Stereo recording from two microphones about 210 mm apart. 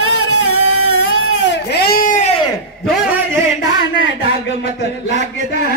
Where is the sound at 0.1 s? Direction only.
80° left.